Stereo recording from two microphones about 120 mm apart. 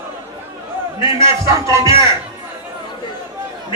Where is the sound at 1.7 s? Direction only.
25° right (ahead or behind).